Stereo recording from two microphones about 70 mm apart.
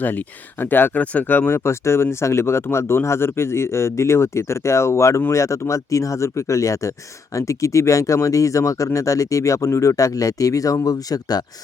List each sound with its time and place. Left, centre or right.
0.0 s speech: left
10.8 s speech: left